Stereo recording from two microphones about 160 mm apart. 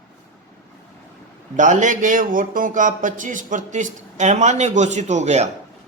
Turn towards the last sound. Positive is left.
turn(degrees=-45)  # may be behind; listen again after turning